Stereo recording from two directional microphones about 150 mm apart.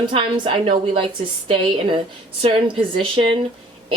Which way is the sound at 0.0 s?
35° right (ahead or behind).